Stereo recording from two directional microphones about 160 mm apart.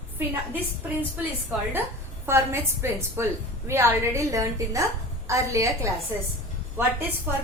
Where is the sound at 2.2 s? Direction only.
15° right (ahead or behind).